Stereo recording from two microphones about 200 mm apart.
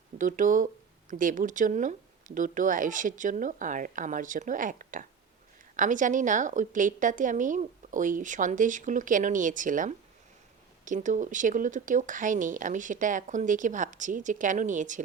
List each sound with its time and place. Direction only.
0.2 s a woman's voice: 40° right (ahead or behind)